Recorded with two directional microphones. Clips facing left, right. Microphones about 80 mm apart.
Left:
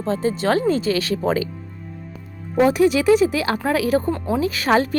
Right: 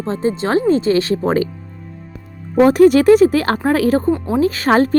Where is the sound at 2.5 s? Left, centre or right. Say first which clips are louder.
Right 6 dB; right.